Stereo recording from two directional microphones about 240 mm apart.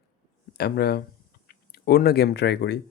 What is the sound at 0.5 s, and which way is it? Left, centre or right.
Speech, left.